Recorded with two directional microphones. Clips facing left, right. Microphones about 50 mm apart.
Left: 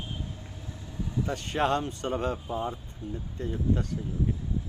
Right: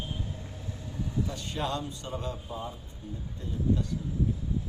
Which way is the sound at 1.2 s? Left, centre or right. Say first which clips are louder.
Left 7 dB; left.